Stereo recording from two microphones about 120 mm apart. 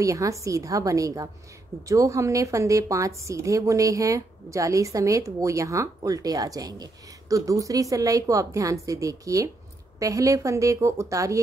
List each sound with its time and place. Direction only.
0.0 s a woman's voice: 25° right (ahead or behind)